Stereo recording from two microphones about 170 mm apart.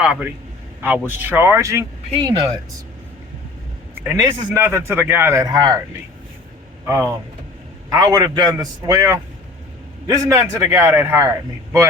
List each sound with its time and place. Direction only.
0.0 s a man's voice: 5° right (ahead or behind)
4.0 s a man's voice: 15° right (ahead or behind)
6.8 s a man's voice: 15° right (ahead or behind)